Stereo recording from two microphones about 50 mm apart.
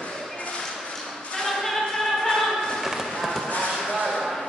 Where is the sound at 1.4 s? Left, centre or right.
Centre.